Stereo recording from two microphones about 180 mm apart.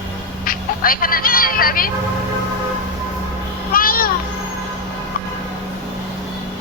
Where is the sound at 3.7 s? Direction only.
55° left (ahead or behind).